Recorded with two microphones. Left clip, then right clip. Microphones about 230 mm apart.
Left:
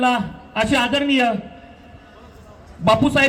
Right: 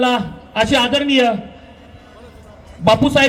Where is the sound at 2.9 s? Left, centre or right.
Right.